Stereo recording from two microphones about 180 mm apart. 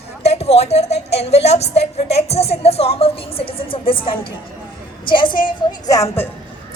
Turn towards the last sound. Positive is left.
turn(degrees=15)  # may be behind; listen again after turning